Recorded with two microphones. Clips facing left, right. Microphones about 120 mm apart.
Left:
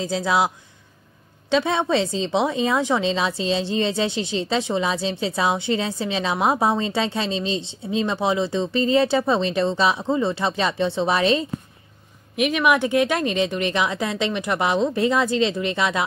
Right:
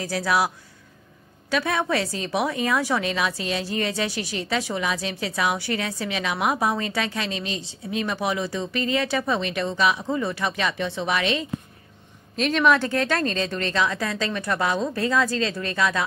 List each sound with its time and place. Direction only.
0.0 s a woman's voice: 20° left (ahead or behind)
1.5 s a woman's voice: 25° left (ahead or behind)
12.4 s a woman's voice: 10° left (ahead or behind)